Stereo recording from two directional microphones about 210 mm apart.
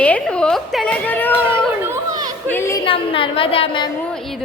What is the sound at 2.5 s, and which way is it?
Speech, 10° left (ahead or behind).